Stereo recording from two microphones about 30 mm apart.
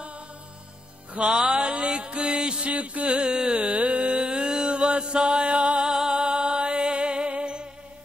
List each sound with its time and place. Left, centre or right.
1.2 s music: centre
1.5 s a sound: right
1.9 s music: right
2.7 s music: right
3.3 s carnatic music: right
3.5 s music: right
4.1 s chant: right
6.1 s music: right